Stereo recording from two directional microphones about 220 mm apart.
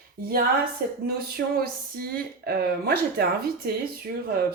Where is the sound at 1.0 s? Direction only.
45° right (ahead or behind).